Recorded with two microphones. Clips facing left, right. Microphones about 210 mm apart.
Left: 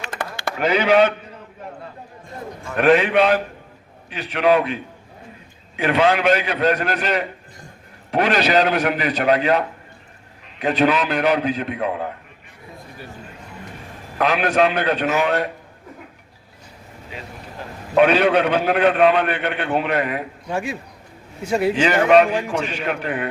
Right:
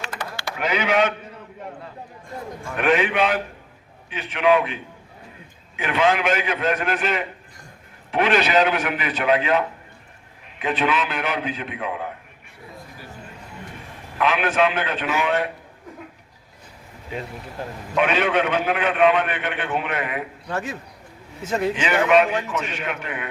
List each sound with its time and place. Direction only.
0.6 s a man's voice: 35° left (ahead or behind)
2.7 s a man's voice: 35° left (ahead or behind)
14.2 s a man's voice: 40° left (ahead or behind)
17.9 s a man's voice: 40° left (ahead or behind)
20.5 s a man's voice: 15° left (ahead or behind)
21.8 s a man's voice: 35° left (ahead or behind)